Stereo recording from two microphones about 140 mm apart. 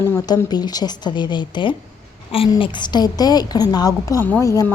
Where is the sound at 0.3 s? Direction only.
30° left (ahead or behind).